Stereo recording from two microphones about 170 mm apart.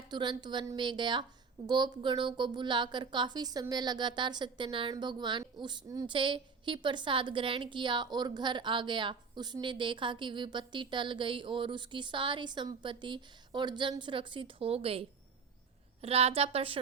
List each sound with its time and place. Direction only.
0.1 s a woman's voice: 25° right (ahead or behind)